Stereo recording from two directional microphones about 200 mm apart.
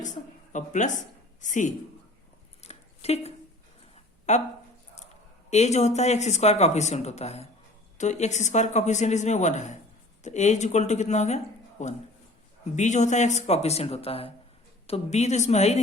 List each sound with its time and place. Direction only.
0.0 s a woman's voice: 40° left (ahead or behind)
2.6 s a sound: 30° left (ahead or behind)
4.3 s speech: 35° left (ahead or behind)
5.5 s speech: 35° left (ahead or behind)